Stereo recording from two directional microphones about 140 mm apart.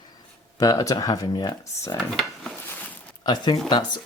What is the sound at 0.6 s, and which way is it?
Speech, 25° left (ahead or behind).